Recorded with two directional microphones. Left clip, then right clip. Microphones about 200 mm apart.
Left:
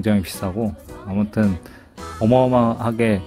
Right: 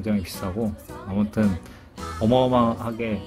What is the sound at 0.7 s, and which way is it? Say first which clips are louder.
Music: left 2 dB; centre (ahead or behind).